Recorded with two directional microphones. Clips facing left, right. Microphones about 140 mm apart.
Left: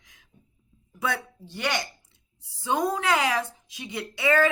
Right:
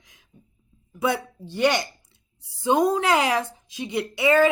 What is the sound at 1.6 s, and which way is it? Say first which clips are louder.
A woman's voice: right 8 dB; 15° right (ahead or behind).